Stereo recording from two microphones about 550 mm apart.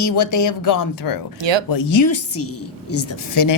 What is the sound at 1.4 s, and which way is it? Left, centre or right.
Speech, right.